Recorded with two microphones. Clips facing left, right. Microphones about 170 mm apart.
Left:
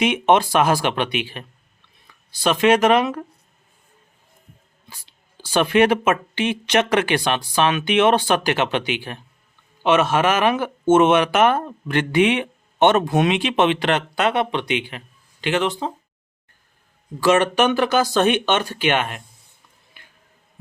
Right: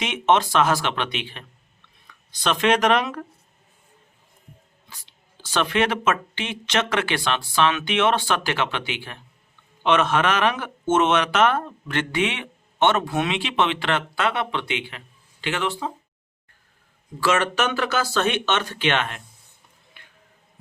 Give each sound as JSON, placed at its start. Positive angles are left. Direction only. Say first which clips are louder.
{"t": 0.0, "sound": "speech", "louder": "left 4 dB", "side_deg": 10}
{"t": 5.4, "sound": "speech", "louder": "left 6 dB", "side_deg": 10}
{"t": 17.2, "sound": "speech", "louder": "left 5 dB", "side_deg": 15}